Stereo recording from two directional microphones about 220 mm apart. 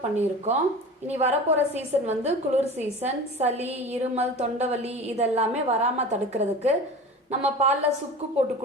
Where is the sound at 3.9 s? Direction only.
30° right (ahead or behind).